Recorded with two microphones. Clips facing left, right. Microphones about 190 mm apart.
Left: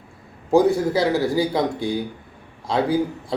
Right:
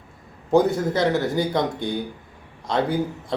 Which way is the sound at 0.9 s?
5° left (ahead or behind).